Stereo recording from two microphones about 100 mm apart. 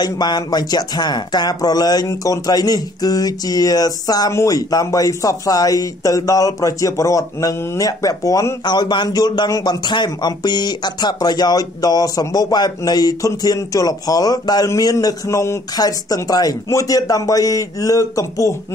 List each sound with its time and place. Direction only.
0.0 s speech: 45° left (ahead or behind)
8.6 s speech: 45° left (ahead or behind); by 15.6 s 25° left (ahead or behind)
15.7 s speech: 40° left (ahead or behind)